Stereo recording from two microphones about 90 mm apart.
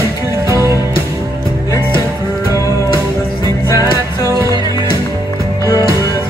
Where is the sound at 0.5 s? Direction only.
35° right (ahead or behind).